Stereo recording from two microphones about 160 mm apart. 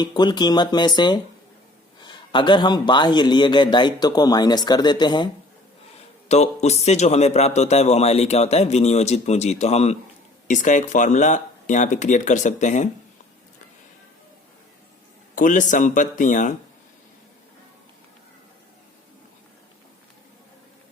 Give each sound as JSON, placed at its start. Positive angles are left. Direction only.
{"t": 0.0, "sound": "a man's voice", "side_deg": 25}
{"t": 6.2, "sound": "a man's voice", "side_deg": 45}
{"t": 15.4, "sound": "a man's voice", "side_deg": 55}